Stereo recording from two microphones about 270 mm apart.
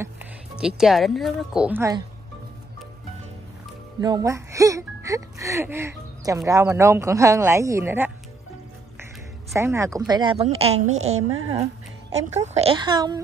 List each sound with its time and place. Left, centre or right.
0.6 s speech: centre
4.0 s speech: centre
9.5 s speech: centre
11.1 s speech: right
12.5 s speech: centre